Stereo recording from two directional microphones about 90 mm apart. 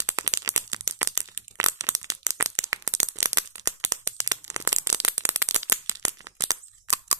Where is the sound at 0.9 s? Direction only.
35° right (ahead or behind).